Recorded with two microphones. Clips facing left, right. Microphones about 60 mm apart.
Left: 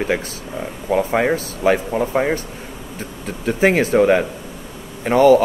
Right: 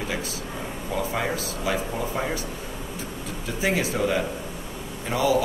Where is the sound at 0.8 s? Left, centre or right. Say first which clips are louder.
Left 10 dB; left.